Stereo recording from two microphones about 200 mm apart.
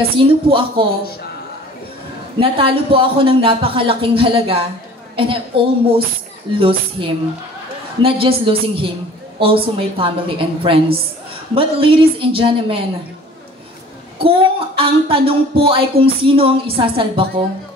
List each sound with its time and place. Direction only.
0.2 s speech: 25° right (ahead or behind)
2.4 s speech: 25° right (ahead or behind)
14.1 s speech: 25° right (ahead or behind)